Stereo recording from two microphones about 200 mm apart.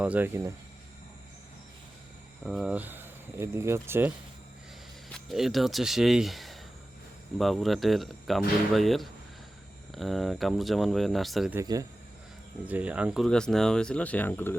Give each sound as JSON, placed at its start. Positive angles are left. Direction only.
{"t": 0.0, "sound": "speech", "side_deg": -5}
{"t": 2.4, "sound": "speech", "side_deg": 0}
{"t": 5.1, "sound": "speech", "side_deg": 0}
{"t": 11.6, "sound": "speech", "side_deg": -20}
{"t": 12.6, "sound": "speech", "side_deg": -10}